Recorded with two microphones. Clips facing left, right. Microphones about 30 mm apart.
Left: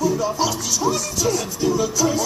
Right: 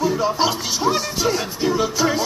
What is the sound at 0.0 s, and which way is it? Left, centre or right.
Music, right.